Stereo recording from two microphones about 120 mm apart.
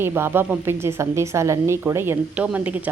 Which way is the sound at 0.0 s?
20° right (ahead or behind).